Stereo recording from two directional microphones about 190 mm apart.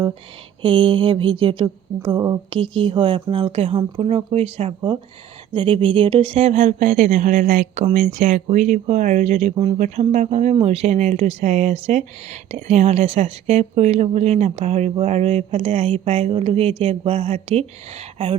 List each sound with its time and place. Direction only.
0.6 s speech: 25° right (ahead or behind)